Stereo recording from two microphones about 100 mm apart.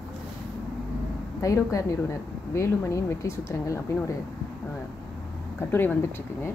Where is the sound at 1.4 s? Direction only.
30° left (ahead or behind).